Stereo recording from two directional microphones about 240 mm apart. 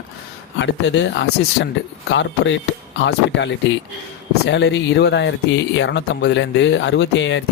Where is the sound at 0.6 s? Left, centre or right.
Left.